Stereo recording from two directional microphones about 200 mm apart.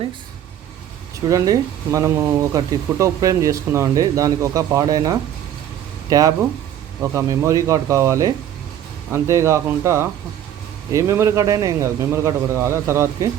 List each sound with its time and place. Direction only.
1.3 s speech: 15° right (ahead or behind)